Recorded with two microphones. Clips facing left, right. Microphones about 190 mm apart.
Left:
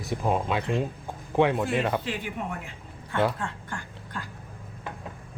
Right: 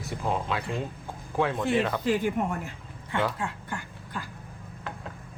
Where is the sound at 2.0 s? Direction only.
45° right (ahead or behind).